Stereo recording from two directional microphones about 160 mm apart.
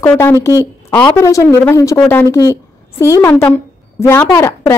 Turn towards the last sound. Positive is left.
turn(degrees=20)  # may be behind; listen again after turning